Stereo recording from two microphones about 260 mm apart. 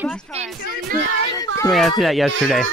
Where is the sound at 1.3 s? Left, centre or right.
Centre.